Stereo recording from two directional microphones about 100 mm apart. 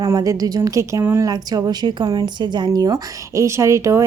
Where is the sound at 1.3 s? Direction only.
40° right (ahead or behind).